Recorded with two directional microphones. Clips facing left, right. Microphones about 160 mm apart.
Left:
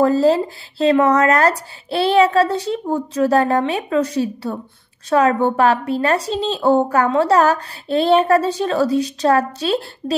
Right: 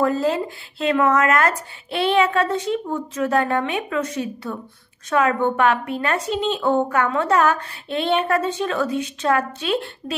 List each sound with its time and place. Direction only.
0.0 s a woman's voice: 35° left (ahead or behind)